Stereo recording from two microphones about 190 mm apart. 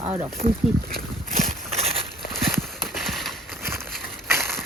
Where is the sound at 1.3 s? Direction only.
45° right (ahead or behind).